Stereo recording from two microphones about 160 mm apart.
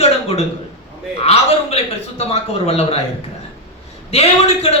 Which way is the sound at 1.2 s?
40° left (ahead or behind).